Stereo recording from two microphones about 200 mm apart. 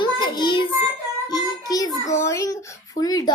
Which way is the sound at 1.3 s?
20° left (ahead or behind).